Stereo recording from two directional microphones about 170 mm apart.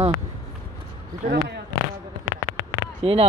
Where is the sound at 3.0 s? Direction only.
35° right (ahead or behind).